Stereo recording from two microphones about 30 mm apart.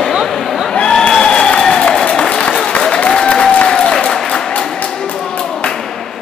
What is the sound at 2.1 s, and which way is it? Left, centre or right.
Applause, left.